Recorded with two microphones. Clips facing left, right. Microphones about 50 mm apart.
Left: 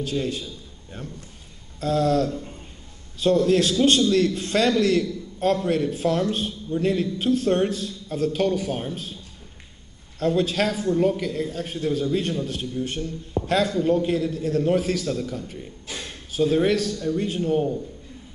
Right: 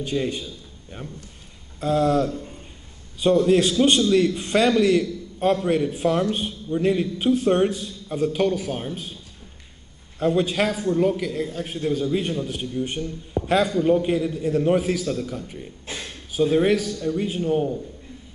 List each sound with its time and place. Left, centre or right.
0.0 s a man's voice: right
10.1 s a man's voice: centre